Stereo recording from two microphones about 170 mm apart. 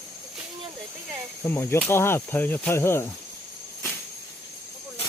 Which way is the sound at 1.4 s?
15° left (ahead or behind).